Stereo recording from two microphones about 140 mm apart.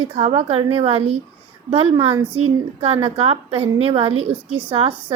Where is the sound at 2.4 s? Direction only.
45° right (ahead or behind).